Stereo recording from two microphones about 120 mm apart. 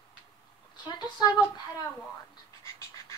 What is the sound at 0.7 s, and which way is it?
Speech, 40° left (ahead or behind).